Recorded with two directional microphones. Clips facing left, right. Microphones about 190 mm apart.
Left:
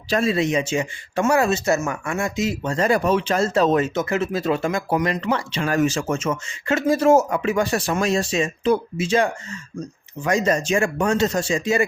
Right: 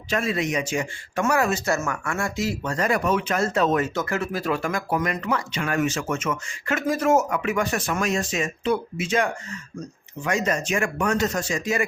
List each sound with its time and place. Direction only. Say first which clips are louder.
0.1 s speech: left 5 dB; 30° left (ahead or behind)